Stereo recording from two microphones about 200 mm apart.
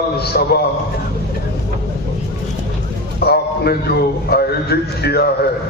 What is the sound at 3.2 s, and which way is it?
A man's voice, 50° left (ahead or behind).